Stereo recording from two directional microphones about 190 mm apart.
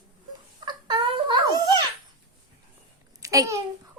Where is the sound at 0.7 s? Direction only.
25° right (ahead or behind).